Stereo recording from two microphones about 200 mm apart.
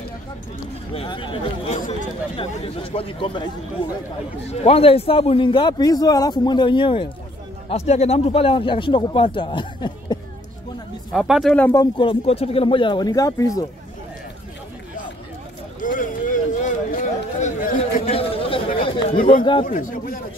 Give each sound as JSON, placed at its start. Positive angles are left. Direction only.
{"t": 0.9, "sound": "a man's voice", "side_deg": 25}
{"t": 4.5, "sound": "a man's voice", "side_deg": 30}
{"t": 11.1, "sound": "speech", "side_deg": 0}
{"t": 15.8, "sound": "a sound", "side_deg": 40}
{"t": 18.1, "sound": "chatter", "side_deg": 30}
{"t": 19.6, "sound": "a man's voice", "side_deg": 40}